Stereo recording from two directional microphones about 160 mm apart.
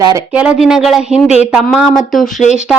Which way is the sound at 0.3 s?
5° right (ahead or behind).